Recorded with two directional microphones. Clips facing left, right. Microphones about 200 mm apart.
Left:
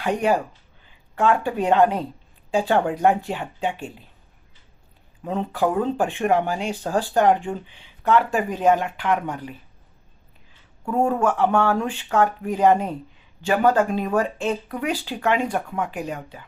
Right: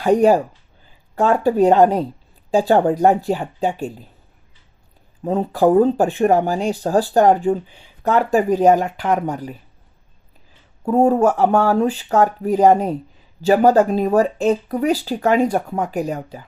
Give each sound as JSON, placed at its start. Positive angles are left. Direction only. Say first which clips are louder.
{"t": 0.0, "sound": "speech", "louder": "right 8 dB", "side_deg": -40}
{"t": 5.2, "sound": "speech", "louder": "right 7 dB", "side_deg": -35}
{"t": 10.8, "sound": "speech", "louder": "right 6 dB", "side_deg": -35}